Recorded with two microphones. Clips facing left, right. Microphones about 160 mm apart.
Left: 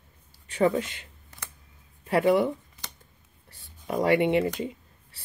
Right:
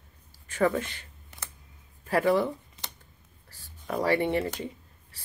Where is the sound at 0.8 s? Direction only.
20° left (ahead or behind).